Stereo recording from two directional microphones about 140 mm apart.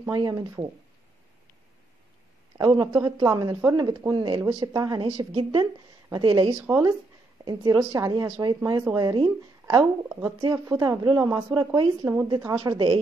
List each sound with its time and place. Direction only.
0.1 s a woman's voice: 30° right (ahead or behind)
2.5 s a man's voice: 35° right (ahead or behind)
2.9 s a woman's voice: 20° right (ahead or behind)
5.0 s speech: 40° right (ahead or behind)
6.1 s a woman's voice: 30° right (ahead or behind)
6.6 s a woman's voice: 20° right (ahead or behind); by 9.8 s 35° right (ahead or behind)
9.8 s a woman's voice: 20° right (ahead or behind)
12.7 s speech: 40° right (ahead or behind)